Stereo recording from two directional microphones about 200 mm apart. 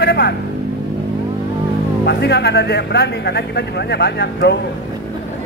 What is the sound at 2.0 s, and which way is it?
Speech, 55° left (ahead or behind).